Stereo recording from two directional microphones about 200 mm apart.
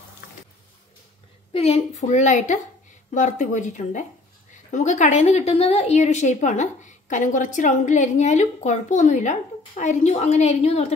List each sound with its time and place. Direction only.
1.5 s a woman's voice: 30° left (ahead or behind)